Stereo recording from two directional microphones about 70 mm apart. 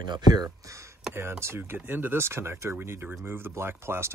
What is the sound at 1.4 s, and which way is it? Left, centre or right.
Speech, right.